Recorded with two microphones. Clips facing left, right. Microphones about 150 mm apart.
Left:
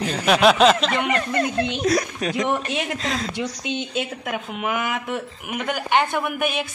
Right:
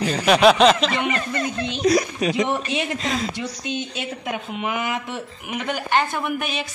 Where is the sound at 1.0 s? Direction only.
60° left (ahead or behind).